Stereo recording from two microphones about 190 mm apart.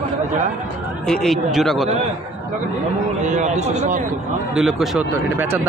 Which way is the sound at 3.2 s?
40° right (ahead or behind).